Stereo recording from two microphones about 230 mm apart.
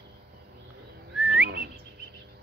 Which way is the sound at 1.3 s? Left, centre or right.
Right.